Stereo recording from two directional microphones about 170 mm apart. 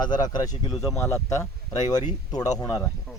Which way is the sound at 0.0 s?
25° left (ahead or behind).